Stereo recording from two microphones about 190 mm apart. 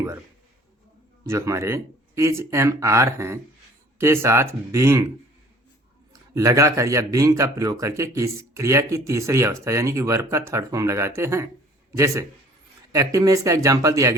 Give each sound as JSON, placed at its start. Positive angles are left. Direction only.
{"t": 1.3, "sound": "speech", "side_deg": -15}
{"t": 6.3, "sound": "a man's voice", "side_deg": -15}